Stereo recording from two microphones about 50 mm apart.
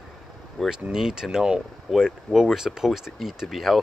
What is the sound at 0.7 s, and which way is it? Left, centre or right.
Speech, centre.